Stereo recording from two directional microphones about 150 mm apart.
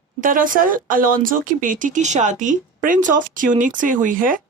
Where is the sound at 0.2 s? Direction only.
65° right (ahead or behind).